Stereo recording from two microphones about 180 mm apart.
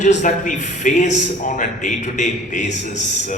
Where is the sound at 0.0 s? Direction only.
45° left (ahead or behind).